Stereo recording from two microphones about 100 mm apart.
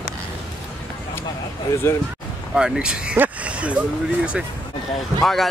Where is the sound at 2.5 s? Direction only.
10° right (ahead or behind).